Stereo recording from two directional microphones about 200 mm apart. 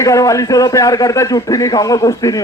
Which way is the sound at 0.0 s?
15° left (ahead or behind).